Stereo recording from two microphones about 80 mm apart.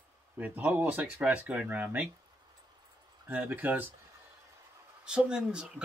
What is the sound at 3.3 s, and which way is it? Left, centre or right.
Speech, right.